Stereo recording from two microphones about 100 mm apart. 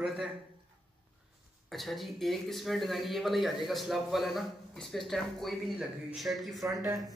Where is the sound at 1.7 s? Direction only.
Centre (ahead or behind).